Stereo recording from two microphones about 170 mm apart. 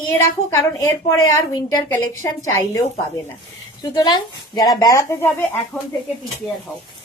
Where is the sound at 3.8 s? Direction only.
25° left (ahead or behind).